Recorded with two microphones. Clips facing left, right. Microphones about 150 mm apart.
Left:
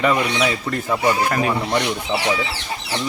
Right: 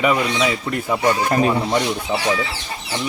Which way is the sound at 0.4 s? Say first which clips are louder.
Right 1 dB; 5° right (ahead or behind).